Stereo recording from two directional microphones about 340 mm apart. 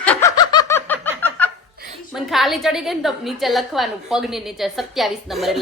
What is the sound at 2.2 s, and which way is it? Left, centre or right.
A woman's voice, centre.